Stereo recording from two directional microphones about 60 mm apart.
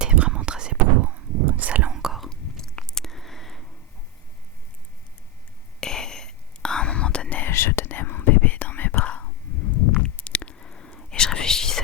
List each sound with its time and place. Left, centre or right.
0.0 s whispering: centre
1.0 s dog: right
1.9 s whispering: centre
2.3 s chewing: centre
5.8 s whispering: centre
7.4 s whispering: left; by 11.8 s centre